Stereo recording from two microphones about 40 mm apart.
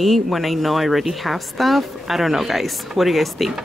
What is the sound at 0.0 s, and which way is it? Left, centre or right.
Speech, centre.